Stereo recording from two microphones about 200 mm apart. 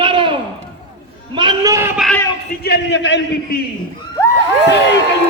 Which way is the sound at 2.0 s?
5° left (ahead or behind).